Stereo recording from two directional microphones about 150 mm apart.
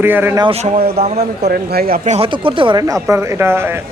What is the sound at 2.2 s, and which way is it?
Speech, 35° right (ahead or behind).